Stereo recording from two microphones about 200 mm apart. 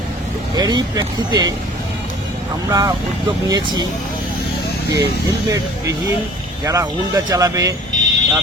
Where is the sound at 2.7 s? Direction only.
15° right (ahead or behind).